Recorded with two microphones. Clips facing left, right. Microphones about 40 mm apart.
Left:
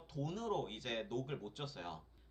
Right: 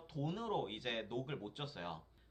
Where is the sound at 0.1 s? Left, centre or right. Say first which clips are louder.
Even; centre.